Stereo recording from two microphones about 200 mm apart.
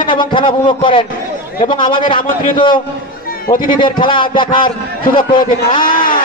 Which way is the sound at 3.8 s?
25° left (ahead or behind).